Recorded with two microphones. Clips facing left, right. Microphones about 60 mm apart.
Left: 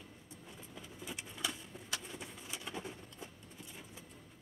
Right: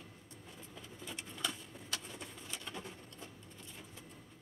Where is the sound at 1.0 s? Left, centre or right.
Centre.